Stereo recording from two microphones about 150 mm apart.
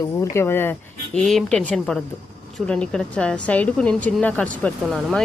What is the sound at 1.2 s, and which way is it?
A woman's voice, centre (ahead or behind).